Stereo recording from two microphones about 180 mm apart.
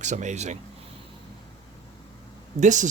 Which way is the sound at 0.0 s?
40° right (ahead or behind).